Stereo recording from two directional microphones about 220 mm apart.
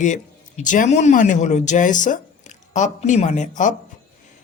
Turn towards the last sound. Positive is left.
turn(degrees=35)  # may be behind; listen again after turning